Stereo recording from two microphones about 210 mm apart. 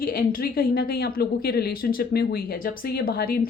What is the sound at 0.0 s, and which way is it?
A woman's voice, 45° left (ahead or behind).